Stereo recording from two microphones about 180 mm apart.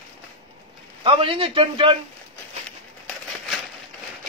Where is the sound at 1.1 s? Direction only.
30° right (ahead or behind).